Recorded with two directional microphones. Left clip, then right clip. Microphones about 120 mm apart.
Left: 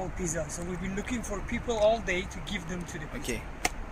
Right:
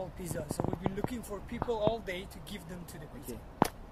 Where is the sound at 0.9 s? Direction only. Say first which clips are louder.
Left 4 dB; 40° right (ahead or behind).